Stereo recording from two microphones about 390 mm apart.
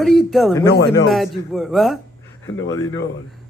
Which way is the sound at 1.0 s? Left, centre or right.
Centre.